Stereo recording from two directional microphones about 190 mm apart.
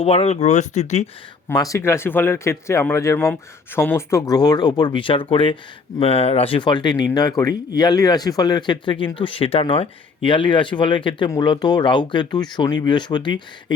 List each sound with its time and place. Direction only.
0.0 s speech: 30° left (ahead or behind)
1.5 s speech: 15° left (ahead or behind)